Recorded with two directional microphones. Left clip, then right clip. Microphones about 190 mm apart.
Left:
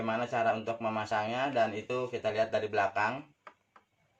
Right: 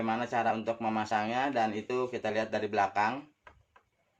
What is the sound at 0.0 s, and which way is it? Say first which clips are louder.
Speech: even; 45° right (ahead or behind).